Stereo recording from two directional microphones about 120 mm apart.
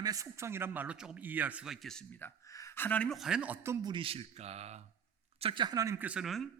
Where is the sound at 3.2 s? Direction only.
5° right (ahead or behind).